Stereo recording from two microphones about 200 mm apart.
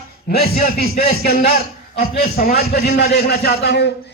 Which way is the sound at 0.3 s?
50° left (ahead or behind).